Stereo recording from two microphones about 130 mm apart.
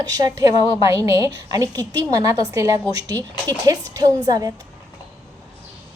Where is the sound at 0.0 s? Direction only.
30° right (ahead or behind).